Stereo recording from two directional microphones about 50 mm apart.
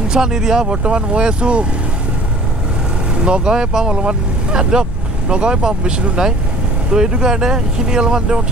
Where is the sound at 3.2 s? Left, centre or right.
Centre.